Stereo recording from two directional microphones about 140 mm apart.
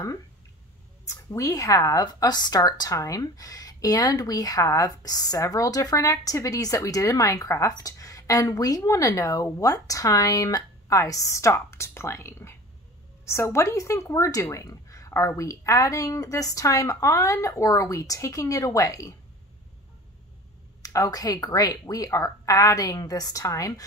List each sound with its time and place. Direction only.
1.0 s speech: 20° left (ahead or behind)
20.8 s speech: 25° left (ahead or behind)